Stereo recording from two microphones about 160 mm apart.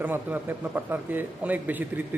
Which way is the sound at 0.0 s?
10° right (ahead or behind).